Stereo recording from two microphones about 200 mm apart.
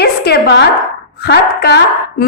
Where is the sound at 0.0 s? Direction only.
55° left (ahead or behind).